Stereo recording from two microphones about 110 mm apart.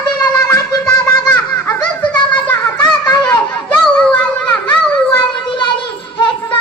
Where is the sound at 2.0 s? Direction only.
10° left (ahead or behind).